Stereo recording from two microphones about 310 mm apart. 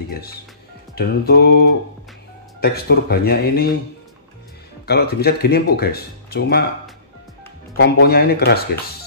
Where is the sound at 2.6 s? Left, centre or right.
Left.